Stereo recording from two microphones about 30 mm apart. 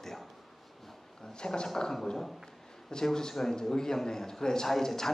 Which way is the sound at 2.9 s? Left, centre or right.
Left.